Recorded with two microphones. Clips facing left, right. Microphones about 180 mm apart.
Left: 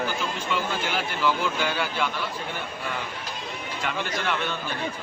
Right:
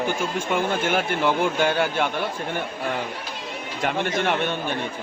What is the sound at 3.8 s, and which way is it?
Speech, 50° right (ahead or behind).